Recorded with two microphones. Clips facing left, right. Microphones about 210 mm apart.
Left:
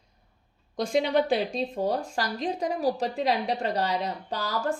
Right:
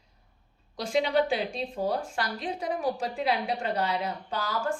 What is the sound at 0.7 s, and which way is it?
Speech, 45° left (ahead or behind).